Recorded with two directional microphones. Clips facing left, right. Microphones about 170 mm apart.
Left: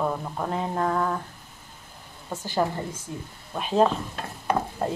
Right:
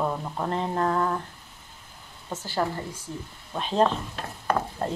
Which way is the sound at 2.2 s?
15° left (ahead or behind).